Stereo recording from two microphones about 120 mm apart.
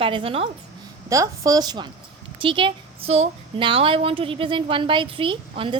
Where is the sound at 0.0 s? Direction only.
50° right (ahead or behind).